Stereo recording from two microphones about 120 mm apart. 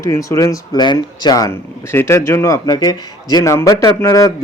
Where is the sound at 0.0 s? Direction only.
25° left (ahead or behind).